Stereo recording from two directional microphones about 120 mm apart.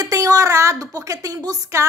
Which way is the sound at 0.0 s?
30° right (ahead or behind).